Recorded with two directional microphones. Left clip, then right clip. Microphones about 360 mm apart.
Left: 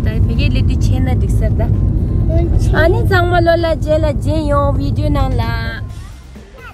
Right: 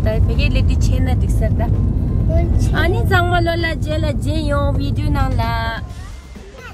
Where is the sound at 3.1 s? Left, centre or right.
Centre.